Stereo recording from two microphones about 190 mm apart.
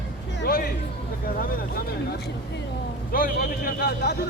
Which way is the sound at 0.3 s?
50° left (ahead or behind).